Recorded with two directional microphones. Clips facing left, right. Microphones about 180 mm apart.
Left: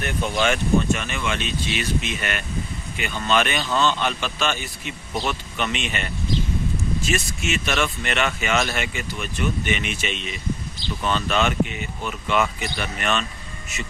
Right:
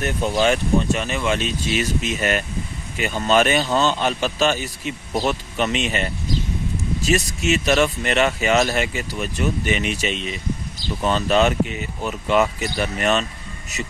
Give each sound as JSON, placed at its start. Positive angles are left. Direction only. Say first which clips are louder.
{"t": 0.0, "sound": "speech", "louder": "right 4 dB", "side_deg": -40}